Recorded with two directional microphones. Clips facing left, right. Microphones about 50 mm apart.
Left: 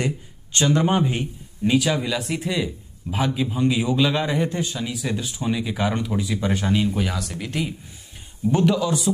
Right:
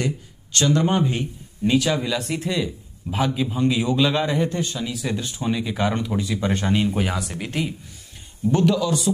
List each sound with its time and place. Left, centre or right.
0.0 s speech: centre
6.7 s speech: centre
8.5 s a man's voice: centre